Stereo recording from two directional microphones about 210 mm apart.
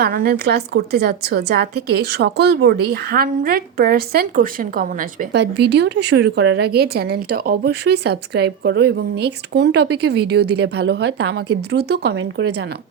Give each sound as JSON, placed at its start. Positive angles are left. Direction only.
{"t": 0.0, "sound": "a woman's voice", "side_deg": -45}